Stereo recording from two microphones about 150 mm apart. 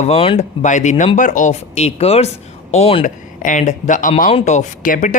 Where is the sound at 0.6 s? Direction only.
55° left (ahead or behind).